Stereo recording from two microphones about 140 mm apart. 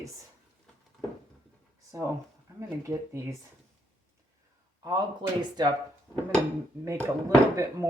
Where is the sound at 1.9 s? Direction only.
20° right (ahead or behind).